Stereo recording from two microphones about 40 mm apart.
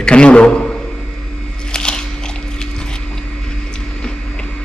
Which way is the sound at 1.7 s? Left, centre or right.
Left.